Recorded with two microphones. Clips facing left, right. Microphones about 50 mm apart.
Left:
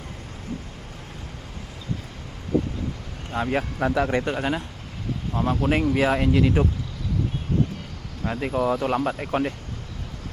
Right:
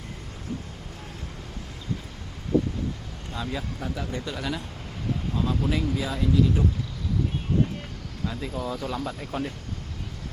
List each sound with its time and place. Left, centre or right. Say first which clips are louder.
3.3 s speech: left 8 dB; left
3.8 s speech: left 10 dB; left
4.2 s speech: left 6 dB; left
8.2 s speech: left 7 dB; left